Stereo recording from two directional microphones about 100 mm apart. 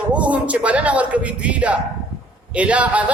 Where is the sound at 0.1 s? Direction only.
10° right (ahead or behind).